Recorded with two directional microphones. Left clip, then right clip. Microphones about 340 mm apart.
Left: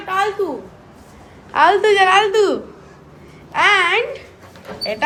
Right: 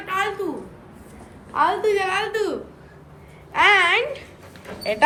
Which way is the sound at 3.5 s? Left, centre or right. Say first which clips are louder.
Left 2 dB; centre.